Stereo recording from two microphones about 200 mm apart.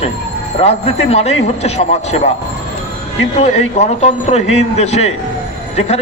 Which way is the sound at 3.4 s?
30° left (ahead or behind).